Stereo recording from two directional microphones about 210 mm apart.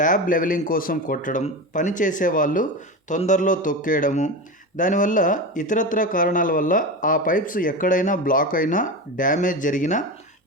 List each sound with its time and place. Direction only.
0.0 s speech: 40° left (ahead or behind)